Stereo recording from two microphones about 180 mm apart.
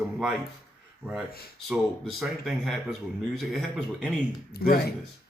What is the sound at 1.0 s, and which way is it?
Speech, 10° right (ahead or behind).